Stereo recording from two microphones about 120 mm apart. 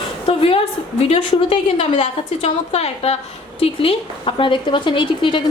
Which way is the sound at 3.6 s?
50° left (ahead or behind).